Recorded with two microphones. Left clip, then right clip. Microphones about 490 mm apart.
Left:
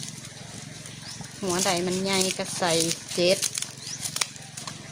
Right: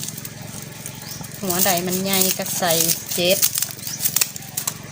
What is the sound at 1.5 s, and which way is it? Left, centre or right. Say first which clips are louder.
Speech: right 4 dB; left.